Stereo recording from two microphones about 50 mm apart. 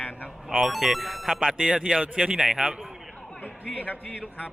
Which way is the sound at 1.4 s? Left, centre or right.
Centre.